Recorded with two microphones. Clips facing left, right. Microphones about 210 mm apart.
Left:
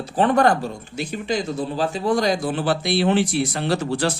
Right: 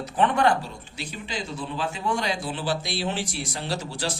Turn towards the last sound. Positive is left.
turn(degrees=60)  # may be behind; listen again after turning